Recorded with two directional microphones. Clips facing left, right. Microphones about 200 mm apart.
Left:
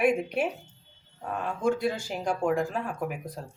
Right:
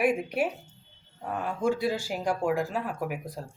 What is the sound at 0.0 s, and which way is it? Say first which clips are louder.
Speech: left 1 dB; 5° right (ahead or behind).